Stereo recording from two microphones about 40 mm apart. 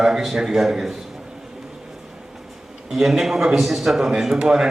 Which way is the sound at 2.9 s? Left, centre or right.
Centre.